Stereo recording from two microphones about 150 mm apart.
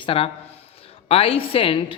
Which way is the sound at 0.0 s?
40° left (ahead or behind).